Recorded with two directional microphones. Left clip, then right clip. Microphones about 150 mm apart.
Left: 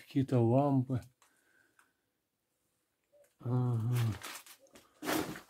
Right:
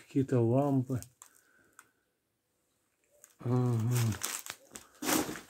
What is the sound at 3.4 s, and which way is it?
Speech, 10° right (ahead or behind).